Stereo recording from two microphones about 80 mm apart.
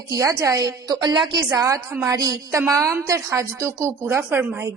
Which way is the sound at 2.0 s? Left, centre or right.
Right.